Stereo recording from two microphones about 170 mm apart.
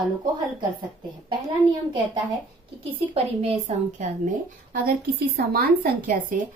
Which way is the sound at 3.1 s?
40° right (ahead or behind).